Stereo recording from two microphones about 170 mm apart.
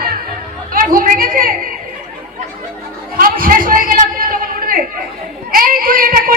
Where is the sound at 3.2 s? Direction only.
55° right (ahead or behind).